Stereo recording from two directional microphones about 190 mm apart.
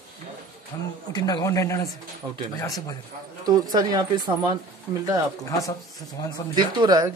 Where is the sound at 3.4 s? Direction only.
20° right (ahead or behind).